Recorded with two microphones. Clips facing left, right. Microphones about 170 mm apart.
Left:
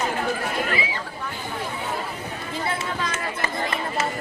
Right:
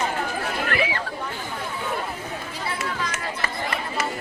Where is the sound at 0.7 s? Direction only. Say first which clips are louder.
Right 2 dB; 65° right (ahead or behind).